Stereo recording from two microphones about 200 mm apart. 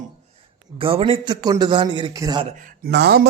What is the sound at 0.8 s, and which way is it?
A man's voice, 25° right (ahead or behind).